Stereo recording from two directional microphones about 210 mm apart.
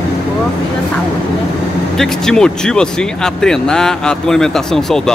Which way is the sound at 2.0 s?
5° left (ahead or behind).